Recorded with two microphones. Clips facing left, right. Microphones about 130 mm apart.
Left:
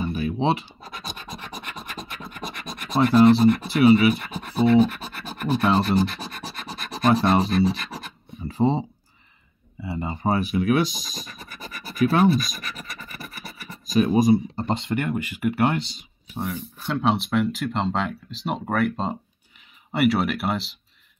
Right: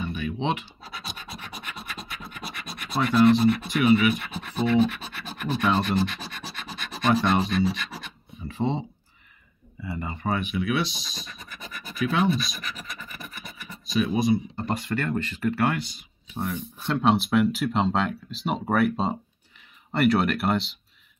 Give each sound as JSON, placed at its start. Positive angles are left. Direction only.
{"t": 0.0, "sound": "scratch", "side_deg": 35}
{"t": 2.4, "sound": "speech", "side_deg": 45}
{"t": 5.4, "sound": "rub", "side_deg": 40}
{"t": 7.0, "sound": "speech", "side_deg": 40}
{"t": 7.4, "sound": "speech", "side_deg": 0}
{"t": 8.5, "sound": "speech", "side_deg": 35}
{"t": 9.8, "sound": "speech", "side_deg": 25}
{"t": 10.2, "sound": "speech", "side_deg": 35}
{"t": 13.1, "sound": "scratch", "side_deg": 5}
{"t": 13.8, "sound": "speech", "side_deg": 45}
{"t": 14.3, "sound": "speech", "side_deg": 30}
{"t": 16.3, "sound": "speech", "side_deg": 0}